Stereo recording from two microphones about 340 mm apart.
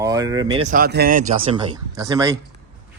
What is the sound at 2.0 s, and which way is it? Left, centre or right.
Speech, centre.